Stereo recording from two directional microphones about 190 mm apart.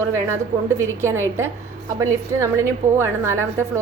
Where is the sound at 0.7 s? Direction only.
15° right (ahead or behind).